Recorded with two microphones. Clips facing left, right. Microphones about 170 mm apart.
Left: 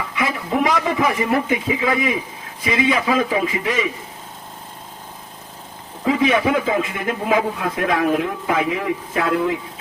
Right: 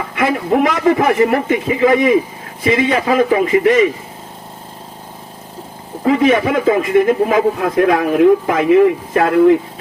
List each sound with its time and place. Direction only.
0.1 s a man's voice: 55° right (ahead or behind)
6.1 s a man's voice: 50° right (ahead or behind)